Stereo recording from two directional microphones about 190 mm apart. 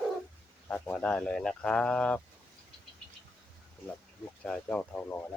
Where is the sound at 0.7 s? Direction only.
5° left (ahead or behind).